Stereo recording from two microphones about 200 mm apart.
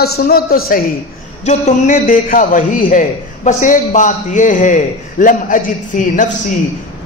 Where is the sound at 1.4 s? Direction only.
35° left (ahead or behind).